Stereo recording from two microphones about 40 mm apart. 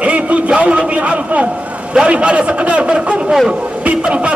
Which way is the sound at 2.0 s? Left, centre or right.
Right.